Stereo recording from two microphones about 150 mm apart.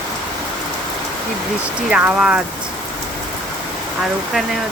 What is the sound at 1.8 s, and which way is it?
Speech, 5° right (ahead or behind).